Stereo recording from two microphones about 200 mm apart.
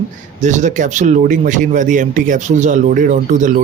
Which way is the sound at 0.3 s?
35° right (ahead or behind).